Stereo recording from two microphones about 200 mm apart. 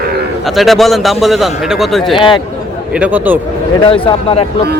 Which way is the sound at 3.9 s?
25° left (ahead or behind).